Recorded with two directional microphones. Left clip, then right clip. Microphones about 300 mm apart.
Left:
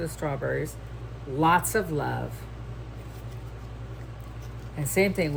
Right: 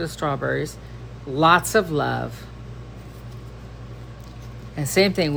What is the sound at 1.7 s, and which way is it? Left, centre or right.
Speech, centre.